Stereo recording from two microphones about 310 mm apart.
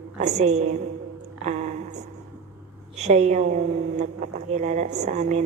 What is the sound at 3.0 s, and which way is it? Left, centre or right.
Speech, right.